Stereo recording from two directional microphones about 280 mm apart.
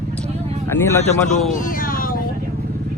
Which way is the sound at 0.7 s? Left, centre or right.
Centre.